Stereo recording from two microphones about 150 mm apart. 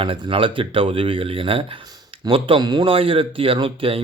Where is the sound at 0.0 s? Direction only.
35° right (ahead or behind).